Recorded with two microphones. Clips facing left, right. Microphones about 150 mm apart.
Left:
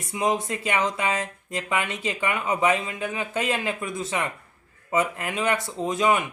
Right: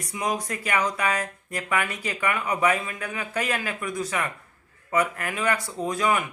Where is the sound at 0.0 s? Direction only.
25° left (ahead or behind).